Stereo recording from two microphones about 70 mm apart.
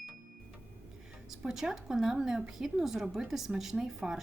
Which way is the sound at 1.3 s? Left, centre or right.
Centre.